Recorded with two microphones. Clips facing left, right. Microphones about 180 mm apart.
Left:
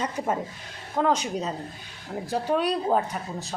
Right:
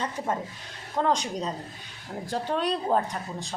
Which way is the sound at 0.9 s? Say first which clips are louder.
Left 2 dB; 5° left (ahead or behind).